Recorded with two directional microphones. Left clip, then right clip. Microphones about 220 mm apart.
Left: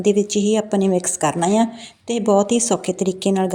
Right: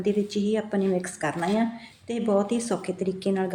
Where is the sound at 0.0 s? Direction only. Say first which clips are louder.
Left 9 dB; 35° left (ahead or behind).